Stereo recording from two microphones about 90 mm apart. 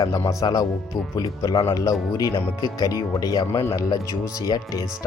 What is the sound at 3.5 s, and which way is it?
Speech, 30° left (ahead or behind).